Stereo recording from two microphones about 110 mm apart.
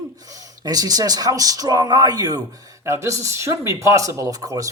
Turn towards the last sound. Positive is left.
turn(degrees=-30)  # may be behind; listen again after turning